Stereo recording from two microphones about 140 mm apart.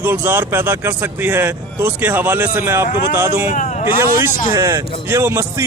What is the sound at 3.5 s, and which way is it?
Speech, 65° left (ahead or behind).